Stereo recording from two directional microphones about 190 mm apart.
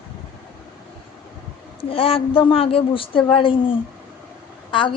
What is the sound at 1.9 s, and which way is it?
A woman's voice, 30° left (ahead or behind).